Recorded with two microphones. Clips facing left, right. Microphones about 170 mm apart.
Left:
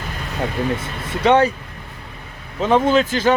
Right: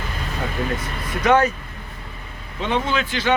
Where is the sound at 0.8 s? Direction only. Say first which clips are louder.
Left 3 dB; 30° left (ahead or behind).